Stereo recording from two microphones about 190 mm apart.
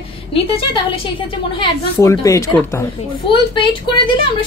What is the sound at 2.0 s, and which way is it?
Speech, 15° left (ahead or behind).